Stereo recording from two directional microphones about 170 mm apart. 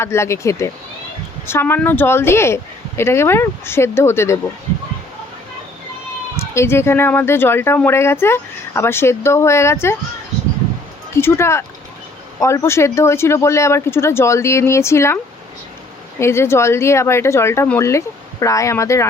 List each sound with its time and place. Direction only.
0.0 s speech: 15° left (ahead or behind)
6.4 s speech: 15° left (ahead or behind)
11.1 s speech: 15° left (ahead or behind)